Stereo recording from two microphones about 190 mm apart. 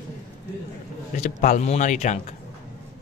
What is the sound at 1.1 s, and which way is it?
Speech, 40° left (ahead or behind).